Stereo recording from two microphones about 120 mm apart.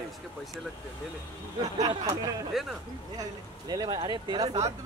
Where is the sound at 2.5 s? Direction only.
Centre (ahead or behind).